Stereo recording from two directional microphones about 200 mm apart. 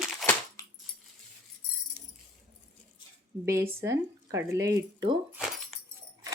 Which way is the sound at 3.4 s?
10° right (ahead or behind).